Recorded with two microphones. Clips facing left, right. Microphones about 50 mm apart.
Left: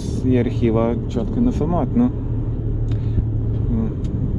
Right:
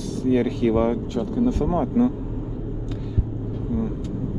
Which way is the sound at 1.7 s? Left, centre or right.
Left.